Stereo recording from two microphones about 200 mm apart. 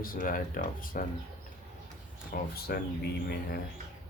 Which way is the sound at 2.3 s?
50° left (ahead or behind).